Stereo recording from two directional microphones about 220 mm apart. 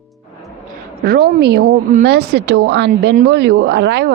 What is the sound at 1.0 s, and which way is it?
A woman's voice, 45° right (ahead or behind).